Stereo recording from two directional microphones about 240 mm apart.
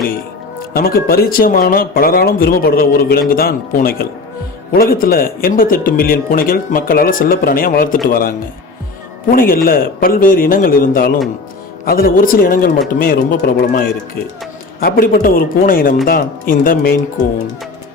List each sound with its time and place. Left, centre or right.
0.7 s speech: left
9.3 s speech: left